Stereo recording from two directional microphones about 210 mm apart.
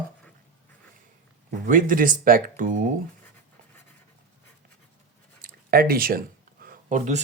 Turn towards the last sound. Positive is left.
turn(degrees=-35)  # may be behind; listen again after turning